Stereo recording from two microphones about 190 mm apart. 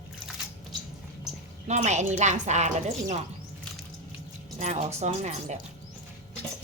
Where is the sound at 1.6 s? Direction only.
35° right (ahead or behind).